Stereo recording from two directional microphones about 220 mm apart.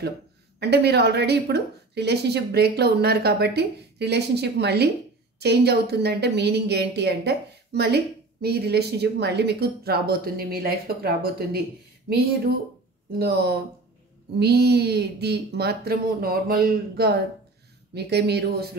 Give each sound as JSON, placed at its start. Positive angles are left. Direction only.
{"t": 0.6, "sound": "a woman's voice", "side_deg": -50}